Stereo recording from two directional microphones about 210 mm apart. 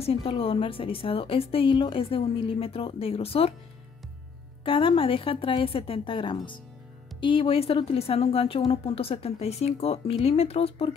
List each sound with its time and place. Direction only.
0.0 s a woman's voice: 25° left (ahead or behind)
4.6 s a woman's voice: 25° left (ahead or behind)